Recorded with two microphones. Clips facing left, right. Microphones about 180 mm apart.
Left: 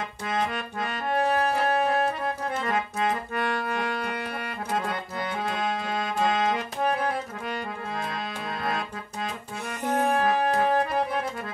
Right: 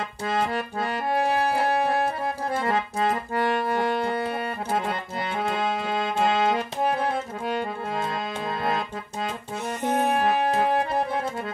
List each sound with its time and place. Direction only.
0.3 s music: 30° right (ahead or behind)
2.5 s accordion: 30° right (ahead or behind)
5.4 s music: 30° right (ahead or behind)
9.8 s music: 20° right (ahead or behind)